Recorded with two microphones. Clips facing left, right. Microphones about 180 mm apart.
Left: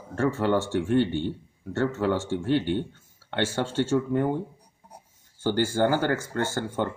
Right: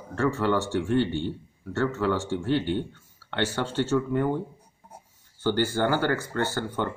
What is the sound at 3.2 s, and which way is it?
Speech, 45° left (ahead or behind).